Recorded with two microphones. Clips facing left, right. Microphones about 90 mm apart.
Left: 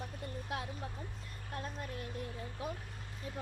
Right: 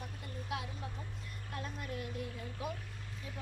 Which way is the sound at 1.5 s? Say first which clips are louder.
Even; 35° left (ahead or behind).